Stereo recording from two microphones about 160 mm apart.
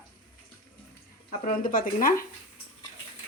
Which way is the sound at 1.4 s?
60° left (ahead or behind).